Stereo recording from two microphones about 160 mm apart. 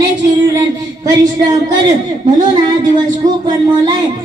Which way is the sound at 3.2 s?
25° right (ahead or behind).